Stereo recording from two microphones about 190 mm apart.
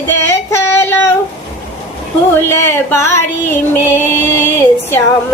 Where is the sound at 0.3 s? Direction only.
15° left (ahead or behind).